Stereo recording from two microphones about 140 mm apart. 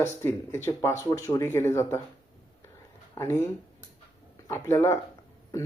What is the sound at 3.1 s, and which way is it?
Speech, 20° left (ahead or behind).